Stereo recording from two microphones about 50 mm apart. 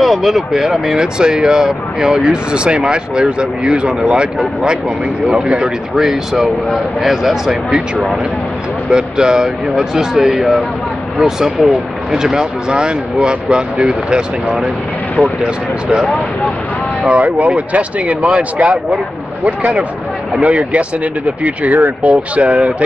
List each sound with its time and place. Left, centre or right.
0.0 s speech: centre
8.9 s speech: centre
17.0 s speech: right